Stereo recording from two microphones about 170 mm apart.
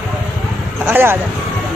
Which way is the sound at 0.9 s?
15° right (ahead or behind).